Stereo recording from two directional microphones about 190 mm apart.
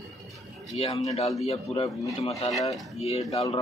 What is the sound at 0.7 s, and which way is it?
Speech, 30° left (ahead or behind).